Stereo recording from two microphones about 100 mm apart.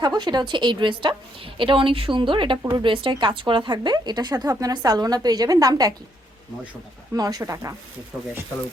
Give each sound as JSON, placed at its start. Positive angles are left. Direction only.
{"t": 0.0, "sound": "a woman's voice", "side_deg": -45}
{"t": 7.1, "sound": "speech", "side_deg": -40}